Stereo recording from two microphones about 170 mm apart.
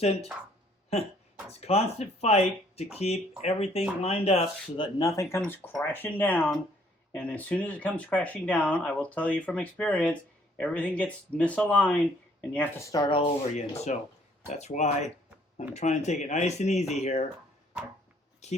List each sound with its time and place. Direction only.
0.0 s speech: 35° left (ahead or behind)
1.5 s speech: 35° left (ahead or behind)
4.8 s speech: 20° left (ahead or behind); by 17.2 s 40° left (ahead or behind)
18.4 s speech: 40° left (ahead or behind)